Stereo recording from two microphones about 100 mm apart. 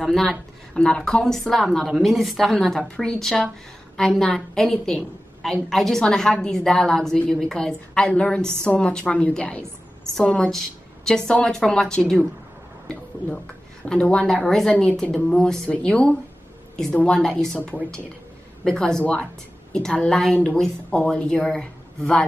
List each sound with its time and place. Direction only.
0.0 s a woman's voice: 5° left (ahead or behind)
13.8 s a woman's voice: 10° left (ahead or behind)
18.6 s a woman's voice: 5° left (ahead or behind)